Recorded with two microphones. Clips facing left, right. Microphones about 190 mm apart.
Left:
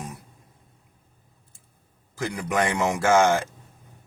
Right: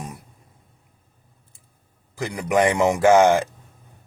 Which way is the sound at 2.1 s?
15° right (ahead or behind).